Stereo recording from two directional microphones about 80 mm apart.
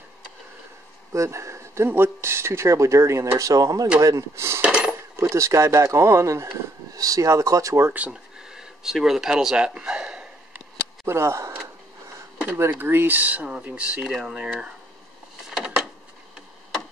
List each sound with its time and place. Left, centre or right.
1.1 s speech: right
4.6 s cutlery: centre
5.3 s speech: right
8.1 s speech: centre
9.8 s a sound: centre
11.1 s speech: right
12.5 s speech: right; by 14.7 s centre
15.5 s a sound: centre